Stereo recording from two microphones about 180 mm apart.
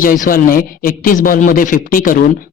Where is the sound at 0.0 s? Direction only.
50° left (ahead or behind).